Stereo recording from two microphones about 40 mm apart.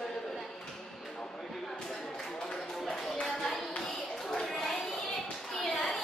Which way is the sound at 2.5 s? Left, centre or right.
Centre.